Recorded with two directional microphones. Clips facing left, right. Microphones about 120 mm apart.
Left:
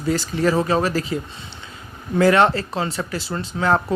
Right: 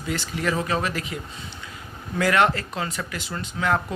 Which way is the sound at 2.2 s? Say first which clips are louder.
Left 5 dB; 30° left (ahead or behind).